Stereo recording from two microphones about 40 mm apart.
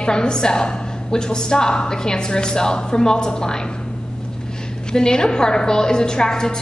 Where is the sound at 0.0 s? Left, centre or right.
Centre.